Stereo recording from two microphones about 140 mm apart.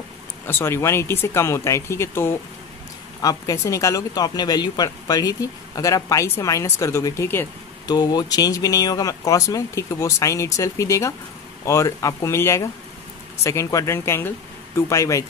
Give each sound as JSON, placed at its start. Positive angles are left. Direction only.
{"t": 0.5, "sound": "speech", "side_deg": 15}
{"t": 7.8, "sound": "speech", "side_deg": 30}